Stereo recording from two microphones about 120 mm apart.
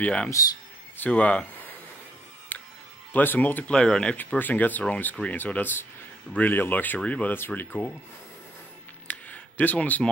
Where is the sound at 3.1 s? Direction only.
15° left (ahead or behind).